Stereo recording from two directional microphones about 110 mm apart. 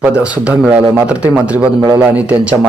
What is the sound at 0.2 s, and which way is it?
Speech, 10° right (ahead or behind).